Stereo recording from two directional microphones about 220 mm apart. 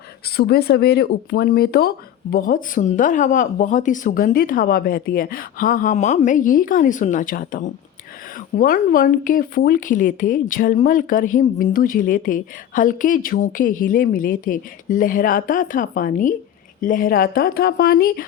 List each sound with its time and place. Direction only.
0.3 s speech: 45° left (ahead or behind)